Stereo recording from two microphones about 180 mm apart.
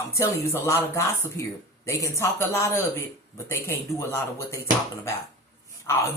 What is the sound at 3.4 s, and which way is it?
Speech, 15° left (ahead or behind).